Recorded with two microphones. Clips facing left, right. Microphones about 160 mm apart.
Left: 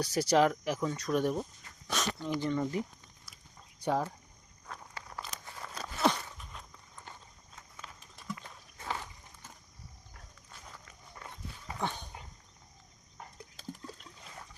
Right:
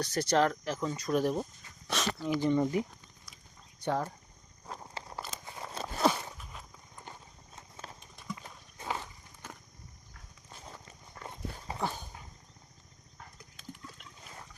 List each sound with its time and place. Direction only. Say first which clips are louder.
0.0 s speech: left 1 dB; 10° left (ahead or behind)
0.9 s speech: right 2 dB; centre (ahead or behind); by 2.8 s 15° right (ahead or behind)
3.8 s speech: left 1 dB; 10° left (ahead or behind)
4.6 s walk: right 3 dB; 30° right (ahead or behind)
6.1 s walk: even; 5° right (ahead or behind)
6.9 s clip-clop: right 2 dB; 15° right (ahead or behind)
8.1 s clip-clop: left 1 dB; centre (ahead or behind)
9.4 s a sound: right 8 dB; 70° right (ahead or behind)
10.5 s clip-clop: right 4 dB; 25° right (ahead or behind)
11.8 s dog: right 1 dB; 5° right (ahead or behind)
13.6 s water: left 3 dB; 35° left (ahead or behind)